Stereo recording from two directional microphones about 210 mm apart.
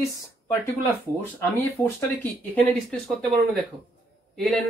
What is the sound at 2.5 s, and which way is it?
Speech, 5° left (ahead or behind).